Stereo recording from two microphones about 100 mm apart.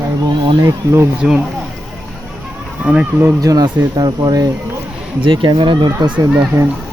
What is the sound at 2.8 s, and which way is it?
Speech, 15° right (ahead or behind).